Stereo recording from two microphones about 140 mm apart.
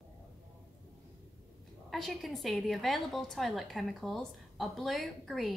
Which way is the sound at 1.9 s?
Centre (ahead or behind).